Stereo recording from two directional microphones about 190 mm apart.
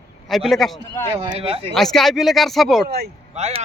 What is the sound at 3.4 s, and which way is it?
Speech, 35° right (ahead or behind).